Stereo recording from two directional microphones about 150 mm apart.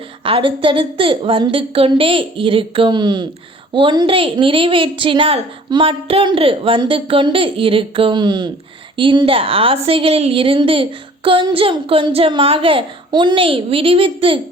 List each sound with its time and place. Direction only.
0.3 s a woman's voice: 35° right (ahead or behind)